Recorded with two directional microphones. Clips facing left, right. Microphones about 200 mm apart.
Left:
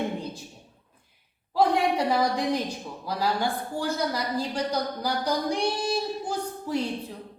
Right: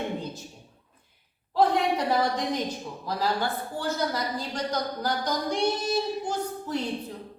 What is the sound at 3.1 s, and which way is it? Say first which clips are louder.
A woman's voice: left 1 dB; 10° left (ahead or behind).